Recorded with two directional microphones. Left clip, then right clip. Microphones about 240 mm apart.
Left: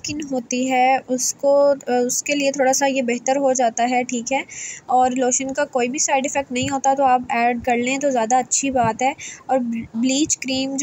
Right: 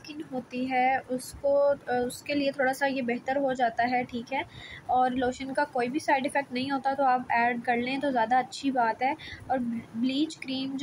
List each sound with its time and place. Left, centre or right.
0.1 s a woman's voice: left